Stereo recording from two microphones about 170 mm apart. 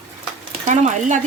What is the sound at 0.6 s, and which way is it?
Speech, 45° right (ahead or behind).